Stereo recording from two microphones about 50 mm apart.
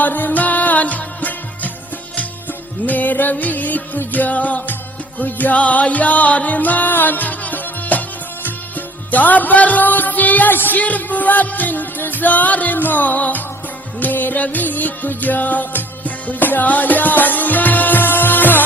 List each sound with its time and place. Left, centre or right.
0.0 s music: left
2.8 s music: left
9.1 s music: left